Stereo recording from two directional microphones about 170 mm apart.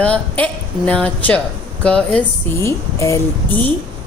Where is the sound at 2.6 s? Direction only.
15° left (ahead or behind).